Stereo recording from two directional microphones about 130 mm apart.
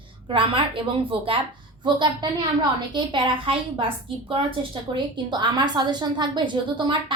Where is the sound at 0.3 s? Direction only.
40° right (ahead or behind).